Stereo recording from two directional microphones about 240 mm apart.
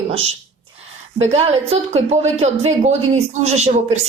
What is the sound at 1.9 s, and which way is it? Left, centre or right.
A woman's voice, right.